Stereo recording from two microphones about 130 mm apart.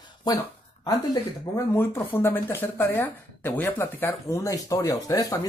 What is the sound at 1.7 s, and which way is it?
Speech, 15° left (ahead or behind).